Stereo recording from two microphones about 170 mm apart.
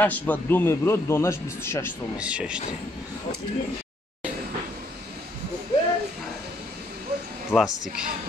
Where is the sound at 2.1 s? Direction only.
5° right (ahead or behind).